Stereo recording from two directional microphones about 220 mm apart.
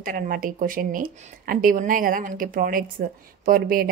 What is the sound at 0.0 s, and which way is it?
A woman's voice, 40° right (ahead or behind).